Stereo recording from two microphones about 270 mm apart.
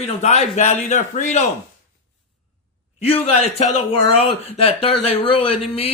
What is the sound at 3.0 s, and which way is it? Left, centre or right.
Speech, left.